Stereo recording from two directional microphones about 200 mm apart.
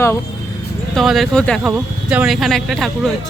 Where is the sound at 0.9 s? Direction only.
Centre (ahead or behind).